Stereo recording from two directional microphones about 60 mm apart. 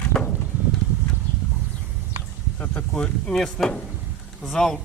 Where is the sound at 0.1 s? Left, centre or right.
Centre.